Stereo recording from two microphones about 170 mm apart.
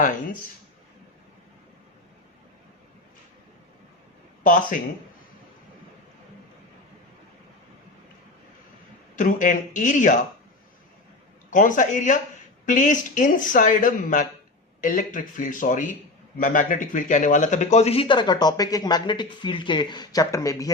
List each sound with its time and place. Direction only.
4.4 s speech: 50° left (ahead or behind)
9.1 s speech: 50° left (ahead or behind)
11.5 s a man's voice: 50° left (ahead or behind); by 20.7 s 20° left (ahead or behind)